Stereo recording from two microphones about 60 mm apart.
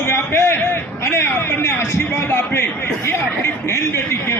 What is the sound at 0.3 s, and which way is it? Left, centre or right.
A man's voice, left.